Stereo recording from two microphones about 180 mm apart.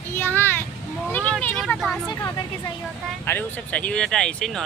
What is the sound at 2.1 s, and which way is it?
A woman's voice, 20° left (ahead or behind).